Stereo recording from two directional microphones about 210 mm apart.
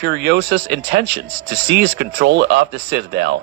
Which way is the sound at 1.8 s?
55° right (ahead or behind).